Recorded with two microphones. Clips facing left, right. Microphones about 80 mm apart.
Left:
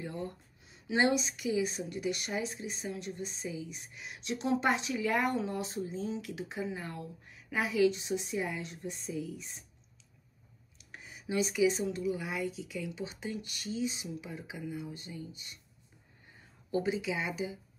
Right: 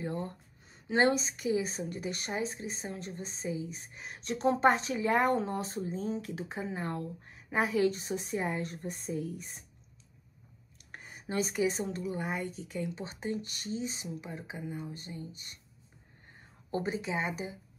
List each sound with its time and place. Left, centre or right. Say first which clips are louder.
0.0 s a woman's voice: right 3 dB; right
10.8 s speech: right 2 dB; right